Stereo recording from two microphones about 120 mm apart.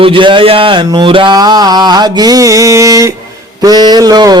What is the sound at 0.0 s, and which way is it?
Speech, 45° right (ahead or behind).